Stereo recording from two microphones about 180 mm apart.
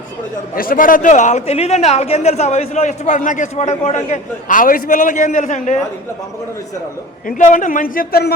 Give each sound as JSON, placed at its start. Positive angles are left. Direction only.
{"t": 0.5, "sound": "speech", "side_deg": 50}
{"t": 7.3, "sound": "a man's voice", "side_deg": 45}